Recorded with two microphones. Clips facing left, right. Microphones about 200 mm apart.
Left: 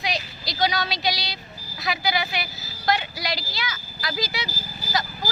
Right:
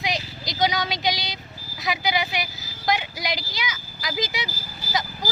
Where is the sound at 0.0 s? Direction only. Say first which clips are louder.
Right 1 dB; 20° right (ahead or behind).